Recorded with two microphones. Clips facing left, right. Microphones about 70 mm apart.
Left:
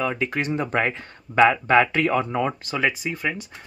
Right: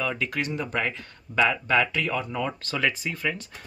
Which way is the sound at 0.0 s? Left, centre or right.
Left.